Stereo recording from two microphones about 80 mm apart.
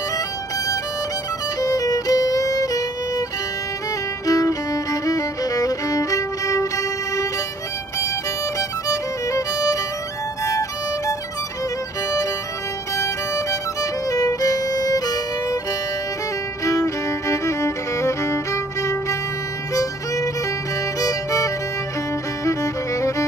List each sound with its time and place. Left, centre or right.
1.6 s violin: left
4.3 s music: left
8.5 s music: left
10.4 s violin: left
12.9 s violin: left
16.6 s music: left